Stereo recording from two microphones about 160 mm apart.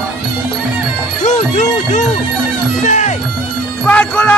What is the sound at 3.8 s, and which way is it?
Music, 5° left (ahead or behind).